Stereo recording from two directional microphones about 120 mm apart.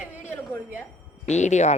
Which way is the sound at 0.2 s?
15° left (ahead or behind).